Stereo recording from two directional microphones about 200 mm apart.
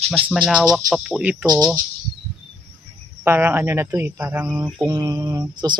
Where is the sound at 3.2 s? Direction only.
10° right (ahead or behind).